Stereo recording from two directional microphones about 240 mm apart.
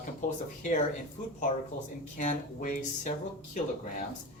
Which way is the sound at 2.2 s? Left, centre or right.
Left.